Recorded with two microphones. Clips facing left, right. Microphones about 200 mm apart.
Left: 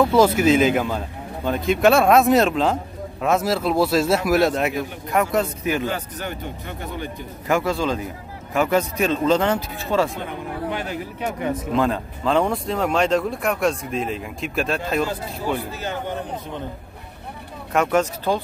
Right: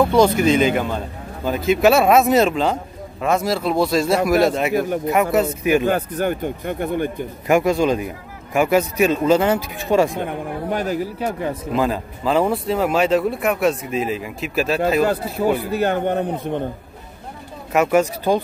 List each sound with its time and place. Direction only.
0.0 s speech: 5° left (ahead or behind)
4.7 s speech: 50° right (ahead or behind)
5.1 s speech: 5° right (ahead or behind)
5.9 s speech: 50° right (ahead or behind)
7.4 s a man's voice: 15° right (ahead or behind)
10.2 s speech: 40° right (ahead or behind)
11.7 s speech: 5° right (ahead or behind)
15.7 s a man's voice: 60° right (ahead or behind)
17.7 s a man's voice: 10° right (ahead or behind)